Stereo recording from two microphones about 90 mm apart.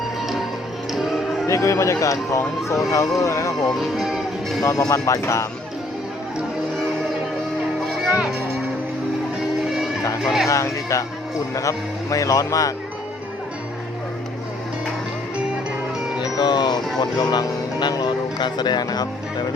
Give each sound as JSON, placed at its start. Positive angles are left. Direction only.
{"t": 1.5, "sound": "speech", "side_deg": 35}
{"t": 3.7, "sound": "speech", "side_deg": 0}
{"t": 4.9, "sound": "speech", "side_deg": 35}
{"t": 8.1, "sound": "speech", "side_deg": 0}
{"t": 10.2, "sound": "speech", "side_deg": 0}
{"t": 10.5, "sound": "speech", "side_deg": 35}
{"t": 16.2, "sound": "music", "side_deg": 50}
{"t": 17.0, "sound": "speech", "side_deg": 50}